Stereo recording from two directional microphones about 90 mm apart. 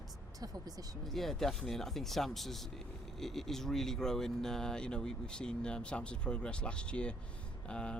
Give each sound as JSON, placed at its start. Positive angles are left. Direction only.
{"t": 0.3, "sound": "speech", "side_deg": -45}
{"t": 1.0, "sound": "speech", "side_deg": 5}